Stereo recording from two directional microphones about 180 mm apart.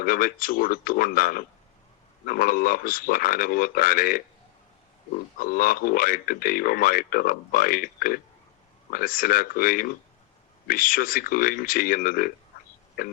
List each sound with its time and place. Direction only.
0.0 s a man's voice: 50° left (ahead or behind)
5.4 s a man's voice: 50° left (ahead or behind)